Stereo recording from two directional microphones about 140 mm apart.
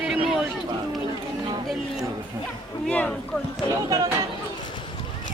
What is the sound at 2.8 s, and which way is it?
Speech, 10° left (ahead or behind).